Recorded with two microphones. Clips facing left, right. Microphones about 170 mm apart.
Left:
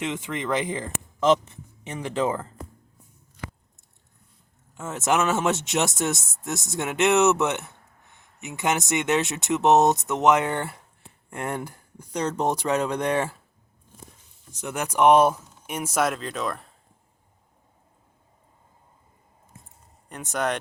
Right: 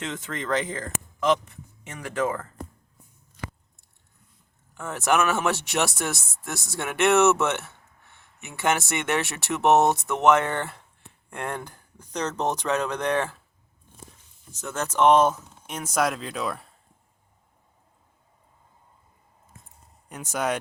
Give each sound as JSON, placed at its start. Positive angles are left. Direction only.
{"t": 0.0, "sound": "speech", "side_deg": 10}
{"t": 1.2, "sound": "speech", "side_deg": 25}
{"t": 4.7, "sound": "speech", "side_deg": 20}
{"t": 14.5, "sound": "speech", "side_deg": 15}
{"t": 20.1, "sound": "speech", "side_deg": 0}